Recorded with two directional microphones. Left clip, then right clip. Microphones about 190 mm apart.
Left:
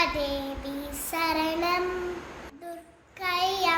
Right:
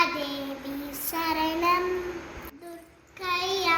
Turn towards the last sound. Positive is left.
turn(degrees=20)  # may be behind; listen again after turning